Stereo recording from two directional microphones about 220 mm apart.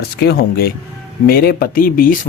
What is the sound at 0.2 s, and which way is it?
Speech, 45° left (ahead or behind).